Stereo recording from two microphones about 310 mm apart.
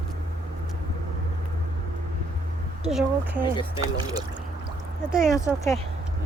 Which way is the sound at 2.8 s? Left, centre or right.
Centre.